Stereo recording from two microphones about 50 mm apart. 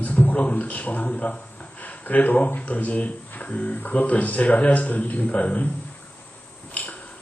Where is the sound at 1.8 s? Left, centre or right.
Left.